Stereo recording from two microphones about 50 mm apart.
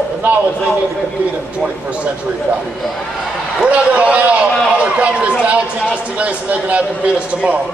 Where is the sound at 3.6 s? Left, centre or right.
Right.